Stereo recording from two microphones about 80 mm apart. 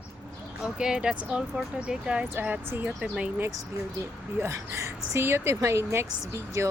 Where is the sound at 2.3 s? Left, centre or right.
Right.